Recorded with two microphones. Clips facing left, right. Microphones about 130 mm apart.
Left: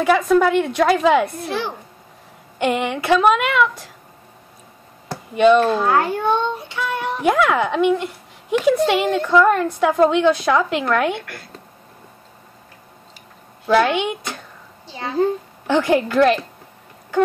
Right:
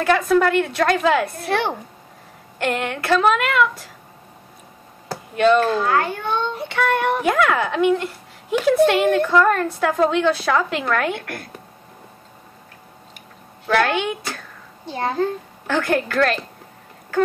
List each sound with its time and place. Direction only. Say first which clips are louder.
0.0 s a woman's voice: left 2 dB; 5° left (ahead or behind)
2.6 s a woman's voice: left 3 dB; 5° left (ahead or behind)
5.0 s a sound: left 3 dB; 5° left (ahead or behind)
5.6 s a child's voice: left 2 dB; 20° left (ahead or behind)
6.6 s child singing: right 5 dB; 65° right (ahead or behind)
7.2 s a woman's voice: left 6 dB; 5° left (ahead or behind)
11.1 s a woman's voice: right 2 dB; 55° right (ahead or behind)
13.7 s a woman's voice: left 3 dB; centre (ahead or behind)
14.9 s child singing: right 5 dB; 55° right (ahead or behind)
16.1 s a woman's voice: left 5 dB; 15° left (ahead or behind)